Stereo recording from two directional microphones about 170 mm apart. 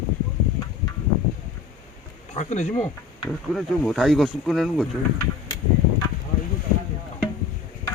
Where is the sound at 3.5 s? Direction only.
Centre (ahead or behind).